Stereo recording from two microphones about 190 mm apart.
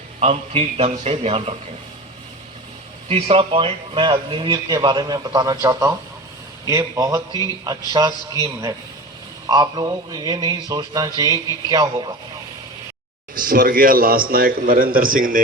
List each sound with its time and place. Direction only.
0.2 s a man's voice: 35° right (ahead or behind)
3.1 s a man's voice: 30° right (ahead or behind)
13.3 s a man's voice: 50° right (ahead or behind)